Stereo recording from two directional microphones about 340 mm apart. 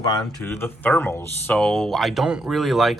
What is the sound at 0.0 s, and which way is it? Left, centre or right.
Speech, centre.